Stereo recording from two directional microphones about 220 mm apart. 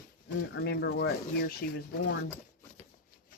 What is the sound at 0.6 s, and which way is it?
Speech, 50° left (ahead or behind).